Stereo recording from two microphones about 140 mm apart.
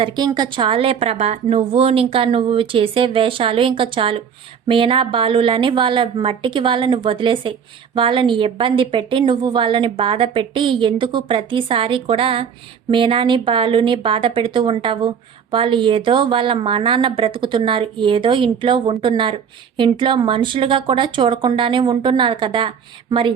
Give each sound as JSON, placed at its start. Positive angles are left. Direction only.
{"t": 0.0, "sound": "a woman's voice", "side_deg": -30}